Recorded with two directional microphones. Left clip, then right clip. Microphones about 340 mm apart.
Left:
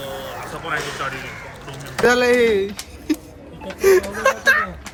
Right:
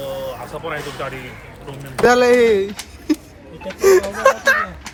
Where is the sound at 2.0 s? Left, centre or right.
Centre.